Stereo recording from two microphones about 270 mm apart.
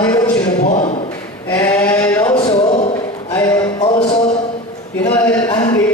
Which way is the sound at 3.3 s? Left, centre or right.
Centre.